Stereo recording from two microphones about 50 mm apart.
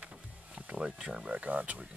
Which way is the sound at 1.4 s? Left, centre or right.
Right.